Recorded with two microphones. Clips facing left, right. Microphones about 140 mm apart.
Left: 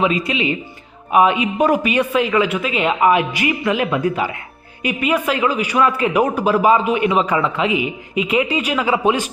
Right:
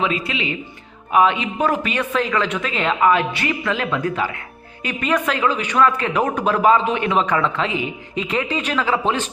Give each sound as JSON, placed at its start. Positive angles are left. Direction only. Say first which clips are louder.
{"t": 0.0, "sound": "speech", "louder": "left 4 dB", "side_deg": 15}